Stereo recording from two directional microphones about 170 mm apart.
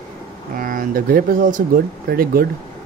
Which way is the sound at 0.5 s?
55° right (ahead or behind).